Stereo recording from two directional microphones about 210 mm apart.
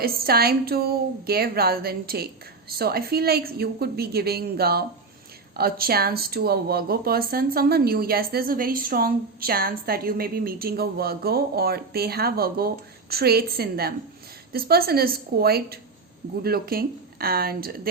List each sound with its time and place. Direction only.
0.0 s speech: 45° right (ahead or behind)